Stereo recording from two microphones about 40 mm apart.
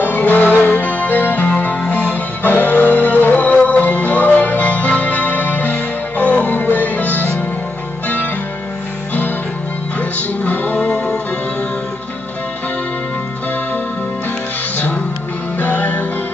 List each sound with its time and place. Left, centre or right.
0.0 s music: left
3.5 s music: left
9.9 s music: left
10.9 s music: left
15.6 s music: left